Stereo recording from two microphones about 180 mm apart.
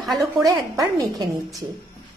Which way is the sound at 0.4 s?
20° right (ahead or behind).